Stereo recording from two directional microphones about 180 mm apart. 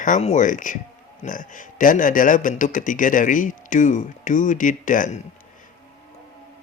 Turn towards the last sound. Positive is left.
turn(degrees=45)  # may be behind; listen again after turning